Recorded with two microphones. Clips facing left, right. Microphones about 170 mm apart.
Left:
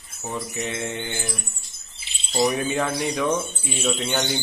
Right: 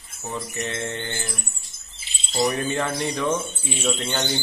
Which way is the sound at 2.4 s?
10° left (ahead or behind).